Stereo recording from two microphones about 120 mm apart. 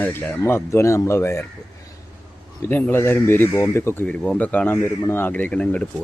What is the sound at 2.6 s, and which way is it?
Speech, 15° left (ahead or behind).